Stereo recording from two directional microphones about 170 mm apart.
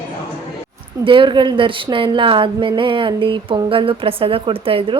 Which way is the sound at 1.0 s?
30° right (ahead or behind).